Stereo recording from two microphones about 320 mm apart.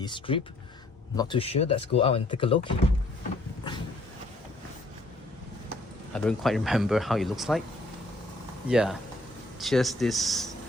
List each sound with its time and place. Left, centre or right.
0.0 s speech: centre
6.1 s speech: centre
8.7 s speech: centre